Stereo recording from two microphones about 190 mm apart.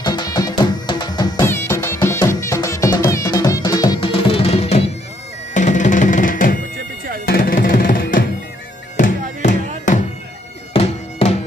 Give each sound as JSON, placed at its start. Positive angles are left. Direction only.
{"t": 0.0, "sound": "music", "side_deg": 20}
{"t": 10.7, "sound": "bagpipes", "side_deg": 30}